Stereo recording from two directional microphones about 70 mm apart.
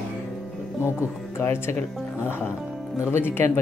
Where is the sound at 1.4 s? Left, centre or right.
Left.